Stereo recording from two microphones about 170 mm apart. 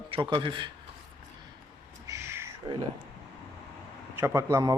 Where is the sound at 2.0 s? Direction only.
15° right (ahead or behind).